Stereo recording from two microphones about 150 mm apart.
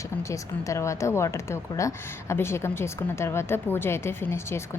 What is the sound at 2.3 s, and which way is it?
A woman's voice, 15° left (ahead or behind).